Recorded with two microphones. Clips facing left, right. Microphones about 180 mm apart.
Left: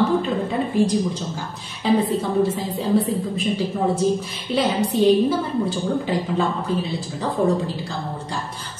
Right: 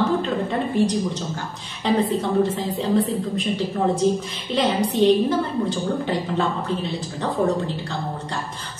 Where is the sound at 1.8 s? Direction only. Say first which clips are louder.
Left 1 dB; 5° left (ahead or behind).